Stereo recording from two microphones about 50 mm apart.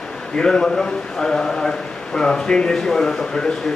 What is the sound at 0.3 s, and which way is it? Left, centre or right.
A man's voice, centre.